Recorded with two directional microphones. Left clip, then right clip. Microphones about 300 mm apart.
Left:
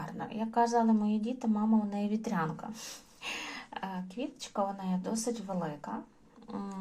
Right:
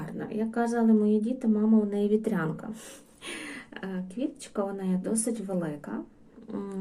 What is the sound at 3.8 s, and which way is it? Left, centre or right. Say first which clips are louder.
A woman's voice: right 4 dB; left.